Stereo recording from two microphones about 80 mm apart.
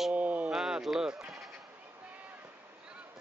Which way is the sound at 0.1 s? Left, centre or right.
Centre.